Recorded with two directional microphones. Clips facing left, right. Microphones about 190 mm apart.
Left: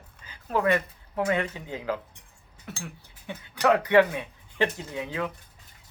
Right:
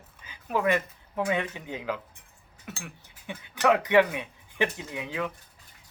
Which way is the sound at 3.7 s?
15° right (ahead or behind).